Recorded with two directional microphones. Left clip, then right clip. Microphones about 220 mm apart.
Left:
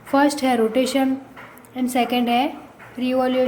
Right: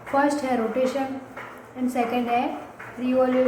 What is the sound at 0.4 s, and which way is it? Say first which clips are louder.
Speech: left 4 dB; 50° left (ahead or behind).